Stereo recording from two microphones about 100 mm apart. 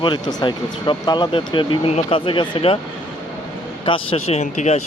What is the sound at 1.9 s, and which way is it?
Speech, 80° left.